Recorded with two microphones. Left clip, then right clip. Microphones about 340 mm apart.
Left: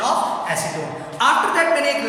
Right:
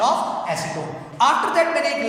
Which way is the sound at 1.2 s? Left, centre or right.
Centre.